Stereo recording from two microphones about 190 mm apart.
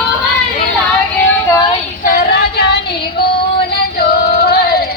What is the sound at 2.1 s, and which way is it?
Female singing, 50° left (ahead or behind).